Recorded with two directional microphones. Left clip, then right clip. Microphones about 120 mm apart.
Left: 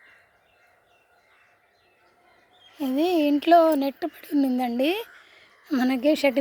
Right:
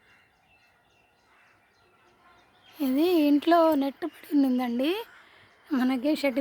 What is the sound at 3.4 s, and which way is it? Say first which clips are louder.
A woman's voice: left 8 dB; 5° right (ahead or behind).